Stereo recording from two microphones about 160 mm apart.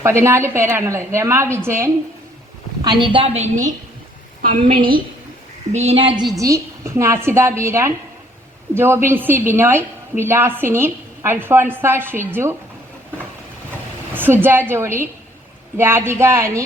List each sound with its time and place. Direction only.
0.0 s a woman's voice: 15° right (ahead or behind)
2.8 s a woman's voice: 30° right (ahead or behind); by 3.7 s 45° right (ahead or behind)
4.4 s a woman's voice: 60° right (ahead or behind)
5.7 s a woman's voice: 40° right (ahead or behind); by 12.5 s 15° right (ahead or behind)
14.1 s a woman's voice: 15° right (ahead or behind)